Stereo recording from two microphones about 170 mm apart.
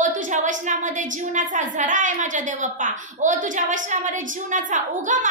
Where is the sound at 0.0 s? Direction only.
50° right (ahead or behind).